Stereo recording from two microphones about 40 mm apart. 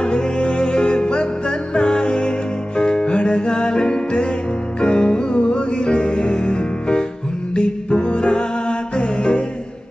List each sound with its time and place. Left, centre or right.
0.0 s music: left